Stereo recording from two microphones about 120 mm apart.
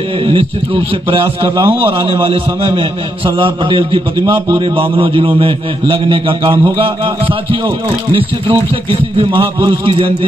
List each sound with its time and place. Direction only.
0.3 s a man's voice: 45° right (ahead or behind)
9.7 s a man's voice: 45° right (ahead or behind)